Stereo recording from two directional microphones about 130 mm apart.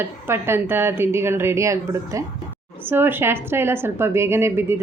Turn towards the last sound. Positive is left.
turn(degrees=-20)  # may be behind; listen again after turning